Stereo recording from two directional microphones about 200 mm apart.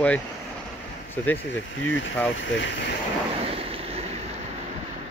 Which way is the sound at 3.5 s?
30° right (ahead or behind).